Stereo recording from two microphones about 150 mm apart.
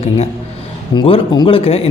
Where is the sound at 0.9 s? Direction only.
35° left (ahead or behind).